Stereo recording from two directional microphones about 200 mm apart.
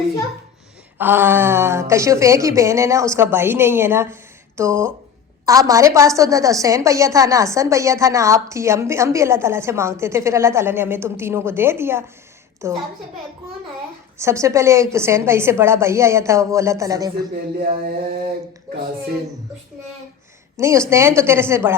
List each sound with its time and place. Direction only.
0.9 s a woman's voice: 10° right (ahead or behind)
14.2 s a woman's voice: 15° right (ahead or behind)
17.3 s a sound: 50° right (ahead or behind)
20.6 s a woman's voice: 15° right (ahead or behind)